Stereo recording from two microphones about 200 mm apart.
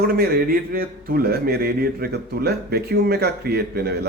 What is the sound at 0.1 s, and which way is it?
A man's voice, 50° right (ahead or behind).